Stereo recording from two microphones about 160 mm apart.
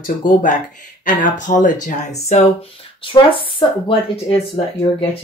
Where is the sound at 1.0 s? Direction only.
55° left (ahead or behind).